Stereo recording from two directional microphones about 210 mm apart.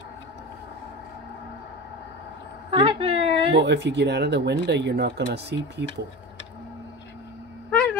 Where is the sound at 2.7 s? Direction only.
25° right (ahead or behind).